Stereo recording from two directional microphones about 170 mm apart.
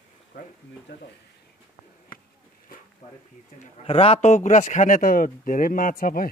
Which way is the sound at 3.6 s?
35° left (ahead or behind).